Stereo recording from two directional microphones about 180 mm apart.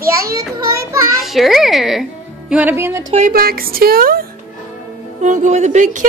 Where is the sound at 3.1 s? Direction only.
50° right (ahead or behind).